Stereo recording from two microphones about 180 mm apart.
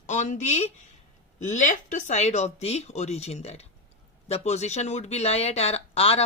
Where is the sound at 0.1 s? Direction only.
40° left (ahead or behind).